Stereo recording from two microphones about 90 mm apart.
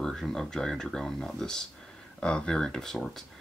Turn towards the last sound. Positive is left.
turn(degrees=5)  # may be behind; listen again after turning